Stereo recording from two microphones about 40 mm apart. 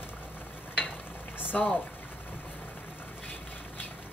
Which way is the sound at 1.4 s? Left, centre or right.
Left.